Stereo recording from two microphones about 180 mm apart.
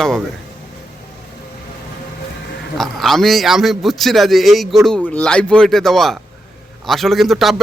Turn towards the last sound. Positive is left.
turn(degrees=0)  # may be behind; listen again after turning